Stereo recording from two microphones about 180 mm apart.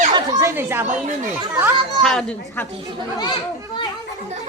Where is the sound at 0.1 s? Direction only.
20° right (ahead or behind).